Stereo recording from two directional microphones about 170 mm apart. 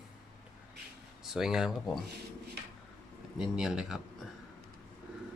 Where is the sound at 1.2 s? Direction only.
5° right (ahead or behind).